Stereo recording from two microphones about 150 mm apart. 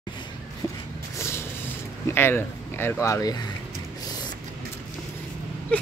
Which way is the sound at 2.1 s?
15° left (ahead or behind).